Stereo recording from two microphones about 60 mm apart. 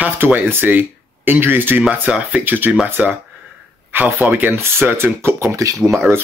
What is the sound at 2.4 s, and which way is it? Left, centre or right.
Speech, right.